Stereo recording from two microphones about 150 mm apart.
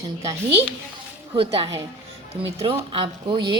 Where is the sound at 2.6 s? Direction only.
35° right (ahead or behind).